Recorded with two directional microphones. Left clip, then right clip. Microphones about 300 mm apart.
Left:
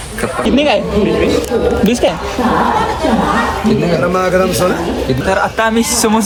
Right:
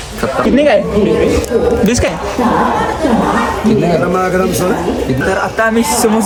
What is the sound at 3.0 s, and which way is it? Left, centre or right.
Speech, centre.